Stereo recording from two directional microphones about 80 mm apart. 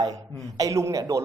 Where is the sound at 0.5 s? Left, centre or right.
Right.